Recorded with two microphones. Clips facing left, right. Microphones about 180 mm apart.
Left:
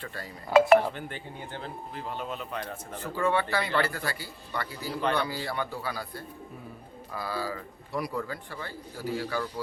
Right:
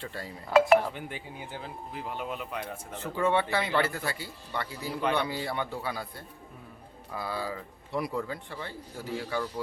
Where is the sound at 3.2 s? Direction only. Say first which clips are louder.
Even; 25° right (ahead or behind).